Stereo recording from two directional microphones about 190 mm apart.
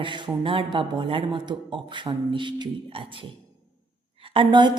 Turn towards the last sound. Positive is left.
turn(degrees=-25)  # may be behind; listen again after turning